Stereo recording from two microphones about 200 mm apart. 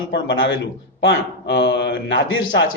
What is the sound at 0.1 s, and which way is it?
A man's voice, 65° left (ahead or behind).